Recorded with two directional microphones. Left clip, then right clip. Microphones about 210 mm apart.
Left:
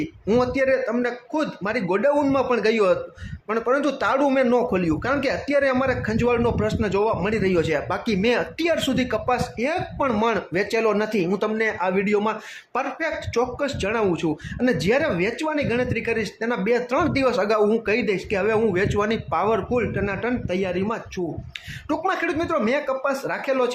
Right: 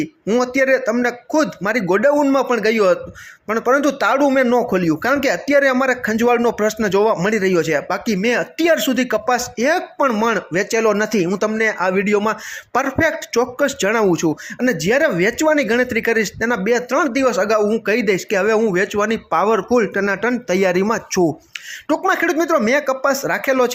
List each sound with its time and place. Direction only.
0.0 s speech: 15° right (ahead or behind)